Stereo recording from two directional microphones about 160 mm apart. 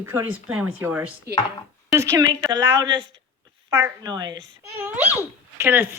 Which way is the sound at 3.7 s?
15° right (ahead or behind).